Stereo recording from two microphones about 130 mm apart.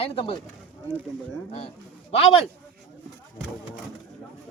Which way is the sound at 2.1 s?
50° left (ahead or behind).